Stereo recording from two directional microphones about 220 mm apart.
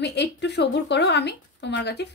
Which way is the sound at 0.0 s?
50° left (ahead or behind).